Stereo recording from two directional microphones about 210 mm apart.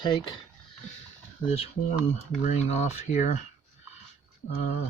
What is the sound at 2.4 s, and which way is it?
Speech, 30° left (ahead or behind).